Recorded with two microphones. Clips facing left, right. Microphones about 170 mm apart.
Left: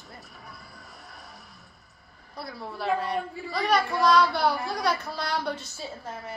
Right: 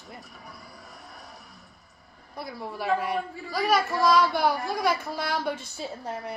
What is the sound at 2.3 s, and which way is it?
Speech, 15° right (ahead or behind).